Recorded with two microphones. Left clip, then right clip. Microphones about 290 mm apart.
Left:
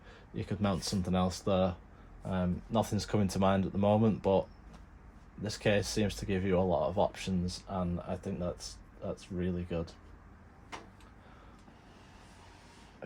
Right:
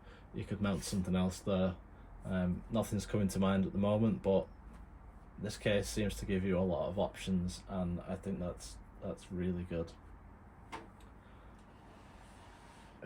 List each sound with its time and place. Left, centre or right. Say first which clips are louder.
0.4 s speech: left 5 dB; left
5.5 s speech: left 4 dB; left